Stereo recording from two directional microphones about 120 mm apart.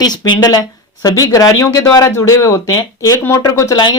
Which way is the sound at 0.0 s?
35° left (ahead or behind).